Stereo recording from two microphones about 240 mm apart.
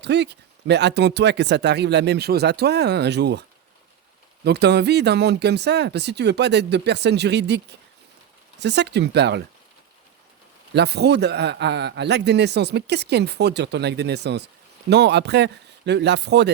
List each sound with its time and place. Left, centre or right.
0.0 s a man's voice: right
4.4 s a man's voice: right
10.8 s a man's voice: right